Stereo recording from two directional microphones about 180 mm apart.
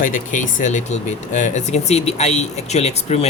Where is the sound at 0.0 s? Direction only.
45° left (ahead or behind).